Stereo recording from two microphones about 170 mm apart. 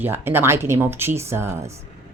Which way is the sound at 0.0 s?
15° right (ahead or behind).